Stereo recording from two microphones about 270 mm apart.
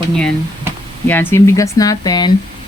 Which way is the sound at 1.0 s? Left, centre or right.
Centre.